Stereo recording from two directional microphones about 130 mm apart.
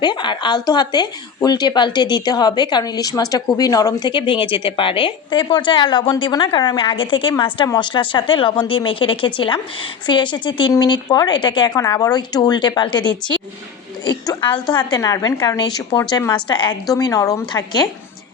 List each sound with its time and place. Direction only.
0.0 s a woman's voice: 35° left (ahead or behind)
16.9 s a woman's voice: 25° left (ahead or behind)